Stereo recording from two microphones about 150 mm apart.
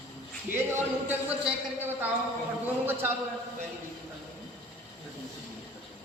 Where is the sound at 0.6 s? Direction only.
15° right (ahead or behind).